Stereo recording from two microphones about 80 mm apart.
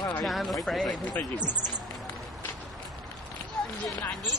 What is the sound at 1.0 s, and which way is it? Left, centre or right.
Speech, centre.